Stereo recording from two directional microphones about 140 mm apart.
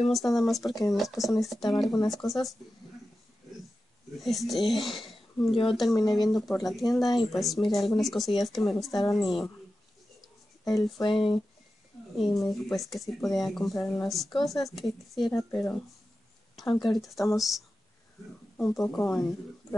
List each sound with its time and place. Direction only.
0.1 s speech: centre (ahead or behind)
4.2 s speech: centre (ahead or behind)
11.0 s speech: 35° left (ahead or behind)
12.4 s speech: centre (ahead or behind)
16.8 s speech: centre (ahead or behind)